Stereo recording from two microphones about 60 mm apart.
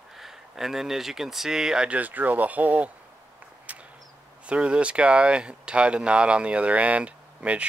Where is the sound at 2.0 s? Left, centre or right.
Right.